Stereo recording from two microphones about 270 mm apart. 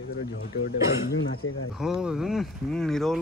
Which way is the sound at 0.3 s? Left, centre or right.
Left.